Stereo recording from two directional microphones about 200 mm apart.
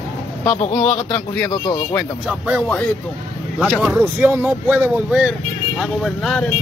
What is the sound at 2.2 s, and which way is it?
Speech, centre (ahead or behind).